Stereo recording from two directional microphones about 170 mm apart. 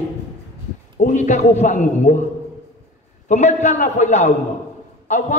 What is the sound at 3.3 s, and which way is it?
A man's voice, 40° left (ahead or behind).